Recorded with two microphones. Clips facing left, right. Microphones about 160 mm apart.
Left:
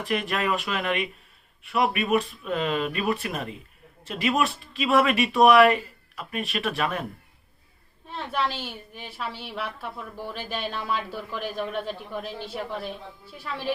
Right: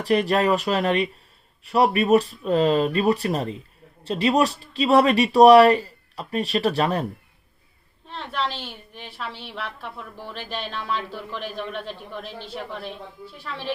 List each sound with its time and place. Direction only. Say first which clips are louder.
0.0 s speech: right 7 dB; 35° right (ahead or behind)
8.0 s a woman's voice: even; 10° left (ahead or behind)
13.4 s a woman's voice: left 1 dB; 10° left (ahead or behind)